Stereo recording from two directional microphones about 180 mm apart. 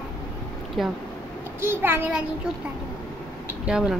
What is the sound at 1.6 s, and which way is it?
Speech, 10° right (ahead or behind).